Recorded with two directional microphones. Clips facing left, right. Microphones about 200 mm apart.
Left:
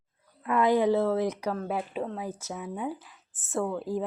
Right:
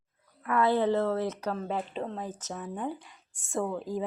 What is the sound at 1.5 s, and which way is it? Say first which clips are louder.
A woman's voice: left 2 dB; 10° left (ahead or behind).